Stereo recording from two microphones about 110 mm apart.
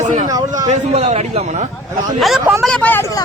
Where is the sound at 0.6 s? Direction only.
85° right.